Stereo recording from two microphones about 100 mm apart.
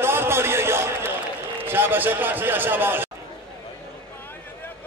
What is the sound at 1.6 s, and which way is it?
A man's voice, 20° right (ahead or behind).